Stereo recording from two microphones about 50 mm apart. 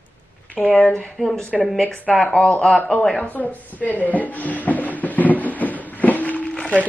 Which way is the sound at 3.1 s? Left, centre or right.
Left.